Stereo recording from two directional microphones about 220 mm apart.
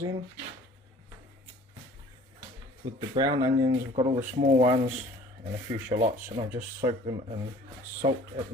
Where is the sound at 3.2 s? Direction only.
15° right (ahead or behind).